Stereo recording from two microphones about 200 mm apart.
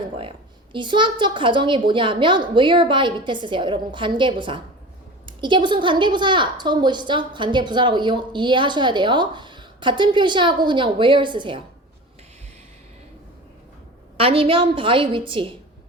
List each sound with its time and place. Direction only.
0.2 s a woman's voice: 25° right (ahead or behind)
14.2 s a woman's voice: 25° right (ahead or behind)